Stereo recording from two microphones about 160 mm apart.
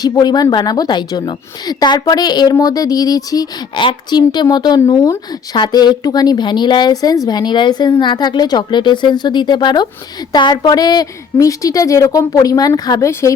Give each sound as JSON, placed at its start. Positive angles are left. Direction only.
{"t": 0.0, "sound": "a woman's voice", "side_deg": 25}